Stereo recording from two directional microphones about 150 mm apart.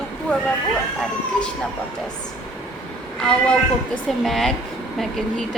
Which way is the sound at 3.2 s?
5° left (ahead or behind).